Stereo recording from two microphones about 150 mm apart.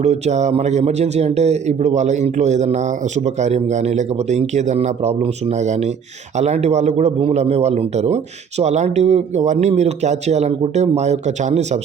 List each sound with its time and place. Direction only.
0.0 s speech: 50° right (ahead or behind)